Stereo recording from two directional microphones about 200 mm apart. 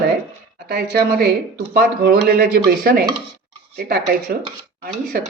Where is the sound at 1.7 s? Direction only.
50° right (ahead or behind).